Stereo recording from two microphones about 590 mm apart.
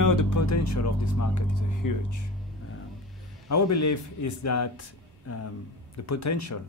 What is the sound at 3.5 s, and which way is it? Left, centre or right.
Speech, left.